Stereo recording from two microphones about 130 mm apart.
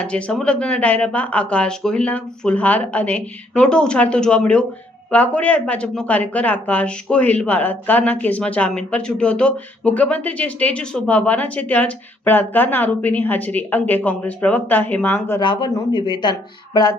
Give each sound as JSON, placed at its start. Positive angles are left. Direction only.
{"t": 0.0, "sound": "a woman's voice", "side_deg": 10}
{"t": 15.4, "sound": "speech", "side_deg": 35}